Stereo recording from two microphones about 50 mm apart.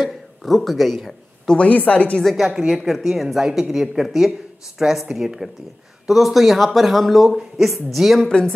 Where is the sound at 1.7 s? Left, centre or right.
Left.